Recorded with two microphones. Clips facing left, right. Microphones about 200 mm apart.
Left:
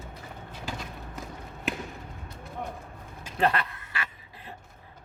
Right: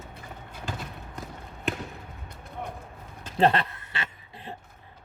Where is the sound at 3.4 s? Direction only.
30° right (ahead or behind).